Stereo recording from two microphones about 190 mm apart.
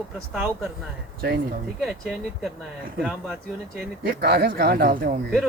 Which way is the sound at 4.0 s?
55° right (ahead or behind).